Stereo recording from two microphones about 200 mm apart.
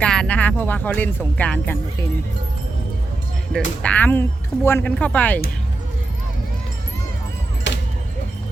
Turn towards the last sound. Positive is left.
turn(degrees=65)  # may be behind; listen again after turning